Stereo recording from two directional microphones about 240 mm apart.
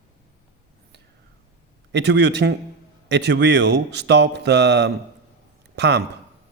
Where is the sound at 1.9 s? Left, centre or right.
Right.